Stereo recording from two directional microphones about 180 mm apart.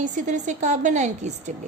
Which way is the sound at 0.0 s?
45° right (ahead or behind).